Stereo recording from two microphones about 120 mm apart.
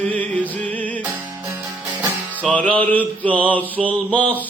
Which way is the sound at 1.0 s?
15° right (ahead or behind).